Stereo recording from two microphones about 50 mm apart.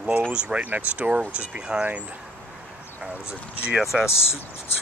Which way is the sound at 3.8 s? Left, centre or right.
Centre.